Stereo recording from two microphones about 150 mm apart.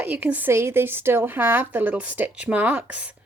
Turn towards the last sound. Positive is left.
turn(degrees=-10)  # may be behind; listen again after turning